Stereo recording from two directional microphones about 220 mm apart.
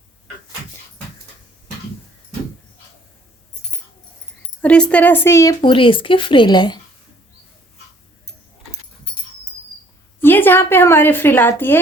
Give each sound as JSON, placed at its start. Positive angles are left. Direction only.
{"t": 4.6, "sound": "speech", "side_deg": 5}
{"t": 10.2, "sound": "a woman's voice", "side_deg": 10}